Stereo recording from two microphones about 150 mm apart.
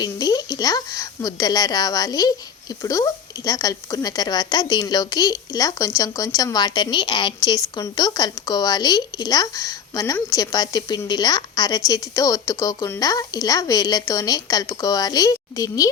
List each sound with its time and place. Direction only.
0.0 s a woman's voice: 25° left (ahead or behind)